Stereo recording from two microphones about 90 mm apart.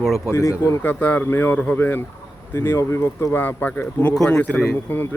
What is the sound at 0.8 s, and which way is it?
A man's voice, 20° left (ahead or behind).